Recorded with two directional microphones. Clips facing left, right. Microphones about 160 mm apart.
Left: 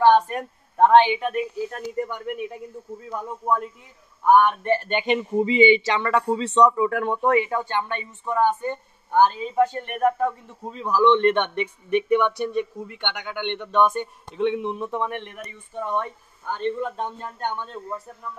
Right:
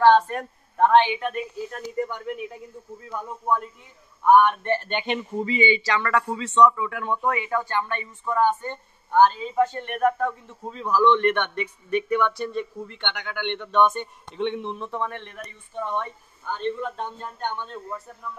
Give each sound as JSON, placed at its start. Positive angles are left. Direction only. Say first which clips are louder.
{"t": 0.0, "sound": "a sound", "louder": "even", "side_deg": 15}
{"t": 1.0, "sound": "a man's voice", "louder": "left 3 dB", "side_deg": 5}
{"t": 4.3, "sound": "speech", "louder": "even", "side_deg": 5}
{"t": 6.9, "sound": "speech", "louder": "left 4 dB", "side_deg": 50}
{"t": 7.2, "sound": "speech", "louder": "left 7 dB", "side_deg": 35}
{"t": 7.4, "sound": "a man's voice", "louder": "even", "side_deg": 20}